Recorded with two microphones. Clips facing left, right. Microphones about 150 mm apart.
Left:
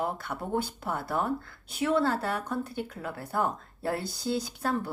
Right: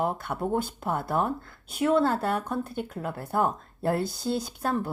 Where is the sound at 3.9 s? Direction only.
50° right (ahead or behind).